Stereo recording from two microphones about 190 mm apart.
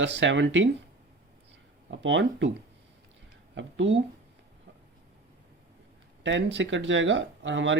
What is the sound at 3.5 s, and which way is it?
Speech, 75° right (ahead or behind).